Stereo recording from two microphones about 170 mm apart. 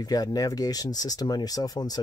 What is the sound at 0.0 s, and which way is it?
Speech, 20° left (ahead or behind).